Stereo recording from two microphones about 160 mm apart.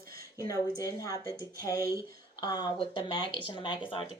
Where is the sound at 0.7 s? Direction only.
70° right (ahead or behind).